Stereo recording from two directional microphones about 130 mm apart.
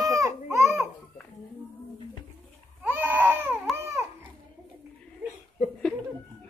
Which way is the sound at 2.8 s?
15° right (ahead or behind).